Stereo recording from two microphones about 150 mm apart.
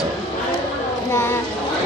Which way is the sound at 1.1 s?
15° left (ahead or behind).